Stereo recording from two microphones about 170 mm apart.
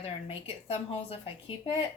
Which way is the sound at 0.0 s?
35° left (ahead or behind).